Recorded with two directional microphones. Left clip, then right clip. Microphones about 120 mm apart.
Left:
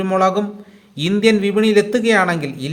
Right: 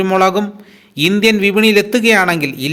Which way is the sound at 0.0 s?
20° right (ahead or behind).